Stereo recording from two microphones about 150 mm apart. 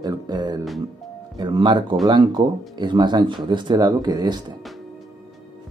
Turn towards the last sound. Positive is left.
turn(degrees=-25)  # may be behind; listen again after turning